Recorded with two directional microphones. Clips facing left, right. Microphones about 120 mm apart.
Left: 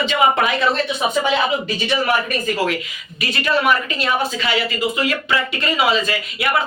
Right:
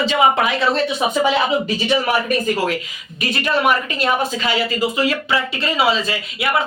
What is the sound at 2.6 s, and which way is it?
Speech, 35° right (ahead or behind).